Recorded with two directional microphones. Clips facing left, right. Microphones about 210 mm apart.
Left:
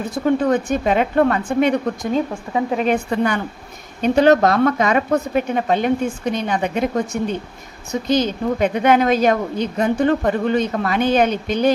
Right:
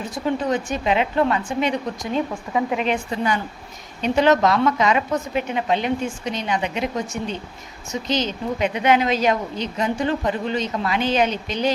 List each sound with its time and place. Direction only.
0.1 s a woman's voice: 55° left (ahead or behind)
2.5 s a woman's voice: 30° left (ahead or behind)
2.8 s a woman's voice: 50° left (ahead or behind)
4.0 s a woman's voice: 45° left (ahead or behind)